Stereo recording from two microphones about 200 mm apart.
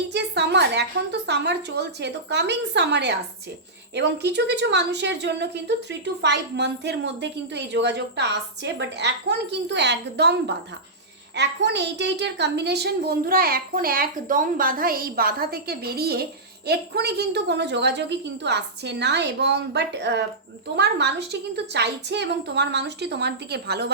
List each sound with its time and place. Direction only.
0.1 s a woman's voice: 55° right (ahead or behind)